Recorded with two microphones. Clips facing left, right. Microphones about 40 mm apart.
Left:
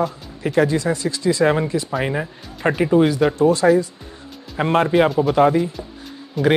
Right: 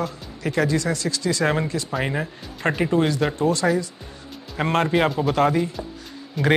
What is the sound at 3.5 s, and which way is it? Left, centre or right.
Speech, centre.